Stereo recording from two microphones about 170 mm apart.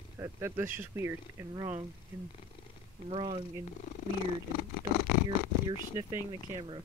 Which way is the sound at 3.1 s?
35° right (ahead or behind).